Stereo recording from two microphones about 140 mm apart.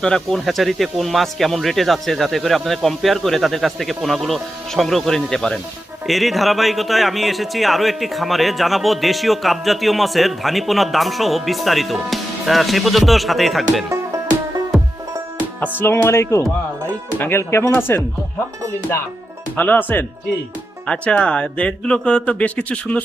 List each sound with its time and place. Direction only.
0.0 s a man's voice: 5° left (ahead or behind)
13.9 s music: 20° right (ahead or behind)
15.8 s speech: 15° left (ahead or behind)
19.5 s speech: 10° left (ahead or behind)